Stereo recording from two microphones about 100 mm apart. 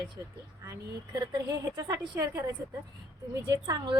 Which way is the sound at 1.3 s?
40° right (ahead or behind).